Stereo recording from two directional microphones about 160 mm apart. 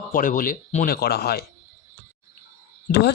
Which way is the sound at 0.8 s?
75° left (ahead or behind).